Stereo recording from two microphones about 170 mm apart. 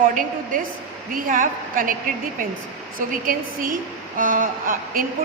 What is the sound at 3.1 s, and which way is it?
A woman's voice, 55° right (ahead or behind).